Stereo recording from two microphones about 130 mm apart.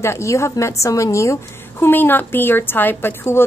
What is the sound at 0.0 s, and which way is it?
A woman's voice, 20° left (ahead or behind).